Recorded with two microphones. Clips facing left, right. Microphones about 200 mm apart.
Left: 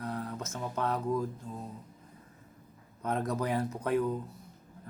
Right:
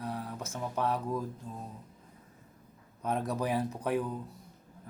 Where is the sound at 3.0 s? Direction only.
15° right (ahead or behind).